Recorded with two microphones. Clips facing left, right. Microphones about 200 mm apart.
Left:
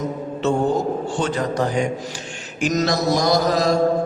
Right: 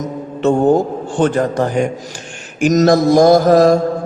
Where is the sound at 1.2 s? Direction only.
50° right (ahead or behind).